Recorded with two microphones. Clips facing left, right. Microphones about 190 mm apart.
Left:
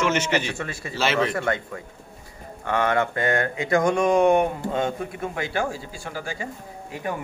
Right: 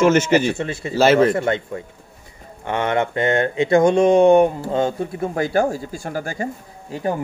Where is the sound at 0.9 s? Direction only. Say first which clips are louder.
Right 9 dB; 45° right (ahead or behind).